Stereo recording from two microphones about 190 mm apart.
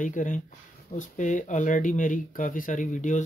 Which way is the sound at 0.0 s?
45° left (ahead or behind).